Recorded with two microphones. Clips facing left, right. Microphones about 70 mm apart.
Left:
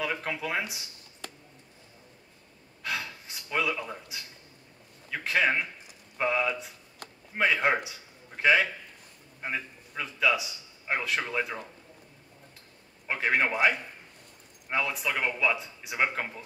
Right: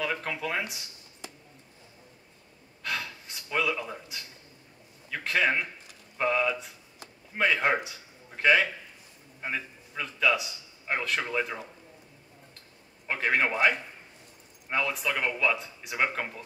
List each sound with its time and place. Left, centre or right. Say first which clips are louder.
0.0 s speech: even; centre
2.8 s gasp: even; centre
5.1 s a man's voice: even; centre
13.0 s speech: even; centre